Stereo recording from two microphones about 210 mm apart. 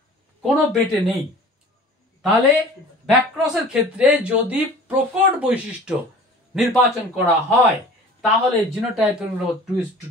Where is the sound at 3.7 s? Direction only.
5° right (ahead or behind).